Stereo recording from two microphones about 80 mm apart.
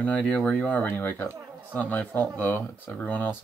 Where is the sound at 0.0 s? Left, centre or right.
Centre.